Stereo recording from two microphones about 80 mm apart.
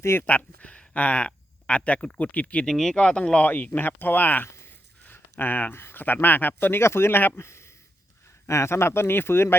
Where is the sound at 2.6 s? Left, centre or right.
Centre.